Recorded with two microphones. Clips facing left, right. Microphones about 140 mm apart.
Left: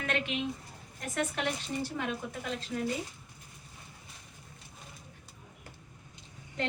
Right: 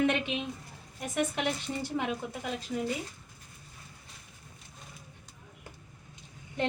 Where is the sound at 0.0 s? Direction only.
20° right (ahead or behind).